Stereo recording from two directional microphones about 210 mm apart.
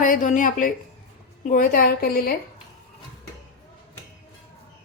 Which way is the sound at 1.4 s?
40° left (ahead or behind).